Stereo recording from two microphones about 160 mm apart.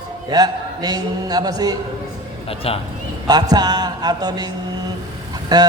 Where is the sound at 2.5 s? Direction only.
35° left (ahead or behind).